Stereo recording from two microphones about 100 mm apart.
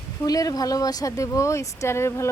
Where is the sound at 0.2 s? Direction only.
35° left (ahead or behind).